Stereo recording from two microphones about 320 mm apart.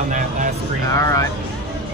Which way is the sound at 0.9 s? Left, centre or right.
Centre.